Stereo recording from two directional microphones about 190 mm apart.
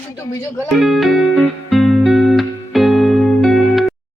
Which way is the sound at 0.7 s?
Centre (ahead or behind).